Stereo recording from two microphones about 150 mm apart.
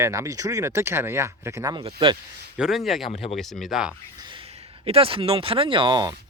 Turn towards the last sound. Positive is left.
turn(degrees=-30)  # may be behind; listen again after turning